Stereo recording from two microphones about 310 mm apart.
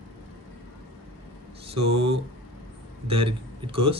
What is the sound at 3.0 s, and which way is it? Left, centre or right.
Speech, centre.